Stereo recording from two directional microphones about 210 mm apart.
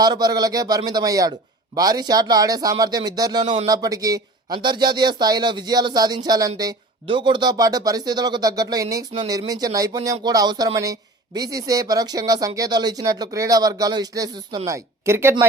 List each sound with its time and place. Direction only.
0.0 s speech: 20° right (ahead or behind)